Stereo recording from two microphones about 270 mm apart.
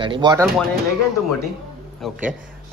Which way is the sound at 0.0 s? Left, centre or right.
Centre.